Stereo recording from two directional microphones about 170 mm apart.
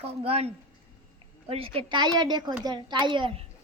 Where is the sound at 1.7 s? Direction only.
30° right (ahead or behind).